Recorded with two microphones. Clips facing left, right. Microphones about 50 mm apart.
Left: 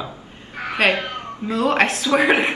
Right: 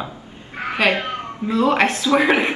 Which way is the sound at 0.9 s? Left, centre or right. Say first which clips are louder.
Right 2 dB; right.